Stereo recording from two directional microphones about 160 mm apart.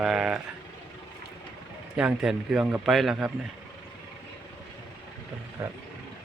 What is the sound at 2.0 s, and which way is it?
A man's voice, 5° right (ahead or behind).